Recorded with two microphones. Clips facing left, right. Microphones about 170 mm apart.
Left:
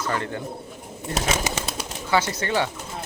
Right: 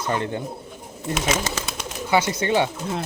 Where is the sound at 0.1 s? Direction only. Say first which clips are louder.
Right 5 dB; 20° right (ahead or behind).